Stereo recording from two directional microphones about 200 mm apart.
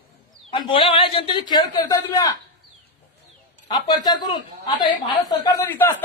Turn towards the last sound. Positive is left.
turn(degrees=10)  # may be behind; listen again after turning